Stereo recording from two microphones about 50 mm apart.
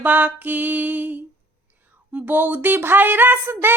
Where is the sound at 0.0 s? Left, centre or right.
Right.